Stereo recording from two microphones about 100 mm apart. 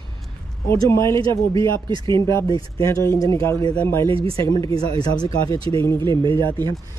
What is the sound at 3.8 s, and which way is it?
Speech, 20° left (ahead or behind).